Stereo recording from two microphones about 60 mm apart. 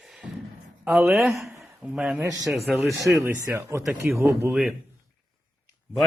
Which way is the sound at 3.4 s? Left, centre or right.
Right.